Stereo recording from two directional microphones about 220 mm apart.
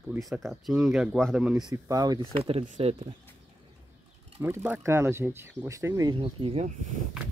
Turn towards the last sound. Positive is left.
turn(degrees=-35)  # may be behind; listen again after turning